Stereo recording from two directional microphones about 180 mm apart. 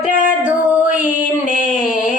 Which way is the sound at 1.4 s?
45° left (ahead or behind).